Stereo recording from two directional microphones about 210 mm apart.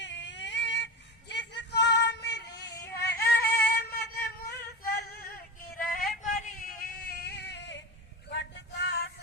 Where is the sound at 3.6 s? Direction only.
50° left (ahead or behind).